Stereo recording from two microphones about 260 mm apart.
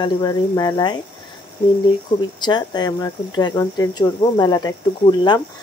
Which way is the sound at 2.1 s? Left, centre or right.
Centre.